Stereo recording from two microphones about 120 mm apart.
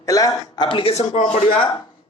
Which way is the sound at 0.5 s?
45° left (ahead or behind).